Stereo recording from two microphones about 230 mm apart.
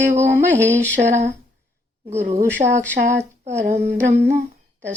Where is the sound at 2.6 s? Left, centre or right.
Right.